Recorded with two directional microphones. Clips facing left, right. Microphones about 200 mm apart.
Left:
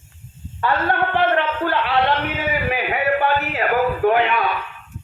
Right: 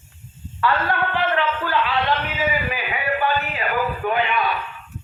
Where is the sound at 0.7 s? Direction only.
50° left (ahead or behind); by 4.2 s 75° left (ahead or behind).